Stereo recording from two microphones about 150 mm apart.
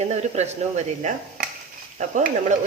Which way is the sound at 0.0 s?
45° right (ahead or behind).